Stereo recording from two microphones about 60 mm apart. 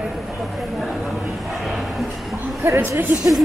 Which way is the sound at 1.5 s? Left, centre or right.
Centre.